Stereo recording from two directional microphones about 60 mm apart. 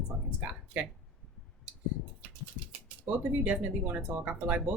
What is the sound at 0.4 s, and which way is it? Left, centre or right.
Speech, right.